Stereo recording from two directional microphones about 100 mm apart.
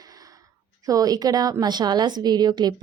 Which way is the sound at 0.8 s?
40° right (ahead or behind).